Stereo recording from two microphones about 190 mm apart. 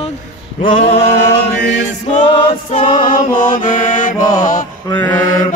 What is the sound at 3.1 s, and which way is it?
Mantra, 45° left (ahead or behind).